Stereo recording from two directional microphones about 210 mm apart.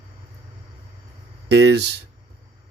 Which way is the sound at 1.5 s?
55° right (ahead or behind).